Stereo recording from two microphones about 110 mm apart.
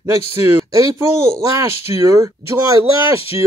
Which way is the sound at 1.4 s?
30° right (ahead or behind).